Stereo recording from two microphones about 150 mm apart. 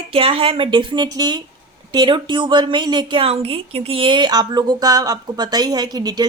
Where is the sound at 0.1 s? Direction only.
40° right (ahead or behind).